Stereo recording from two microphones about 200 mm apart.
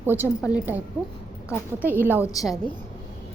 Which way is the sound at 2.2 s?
15° left (ahead or behind).